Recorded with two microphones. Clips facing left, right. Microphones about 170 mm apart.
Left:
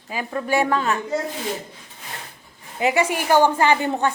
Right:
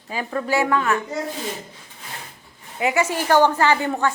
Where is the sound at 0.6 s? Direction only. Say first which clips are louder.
Right 1 dB; 30° left (ahead or behind).